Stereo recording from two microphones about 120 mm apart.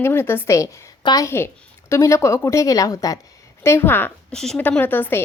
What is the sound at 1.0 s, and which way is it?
Speech, 30° left (ahead or behind).